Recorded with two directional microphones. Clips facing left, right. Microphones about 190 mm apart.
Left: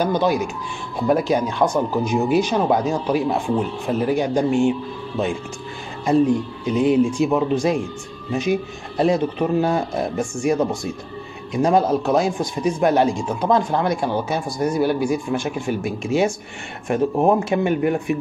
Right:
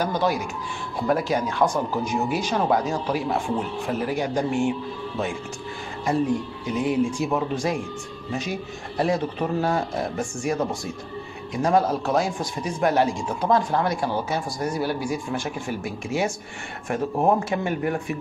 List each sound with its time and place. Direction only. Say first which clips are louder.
0.0 s speech: left 5 dB; 20° left (ahead or behind)
6.0 s speech: left 6 dB; 25° left (ahead or behind)